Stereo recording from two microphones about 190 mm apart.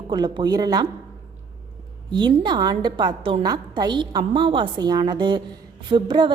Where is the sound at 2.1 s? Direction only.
25° right (ahead or behind).